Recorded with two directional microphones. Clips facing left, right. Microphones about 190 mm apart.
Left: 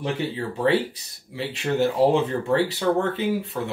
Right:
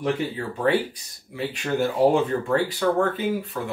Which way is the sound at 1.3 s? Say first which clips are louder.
Left 1 dB; 25° left (ahead or behind).